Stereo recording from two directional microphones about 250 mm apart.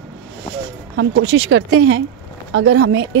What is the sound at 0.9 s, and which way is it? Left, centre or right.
Speech, right.